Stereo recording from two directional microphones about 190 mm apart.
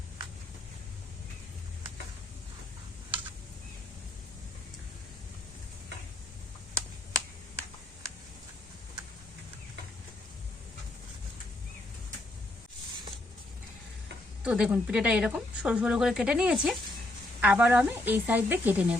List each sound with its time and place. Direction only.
14.4 s a woman's voice: 5° right (ahead or behind)